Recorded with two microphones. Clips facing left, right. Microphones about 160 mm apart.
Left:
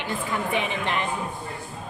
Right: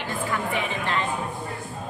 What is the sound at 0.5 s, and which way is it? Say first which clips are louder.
Speech: left 1 dB; 20° left (ahead or behind).